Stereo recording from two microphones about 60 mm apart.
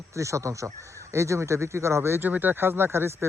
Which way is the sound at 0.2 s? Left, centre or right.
Right.